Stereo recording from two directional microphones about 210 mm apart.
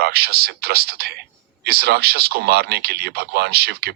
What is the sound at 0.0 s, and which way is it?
Speech, 50° right (ahead or behind).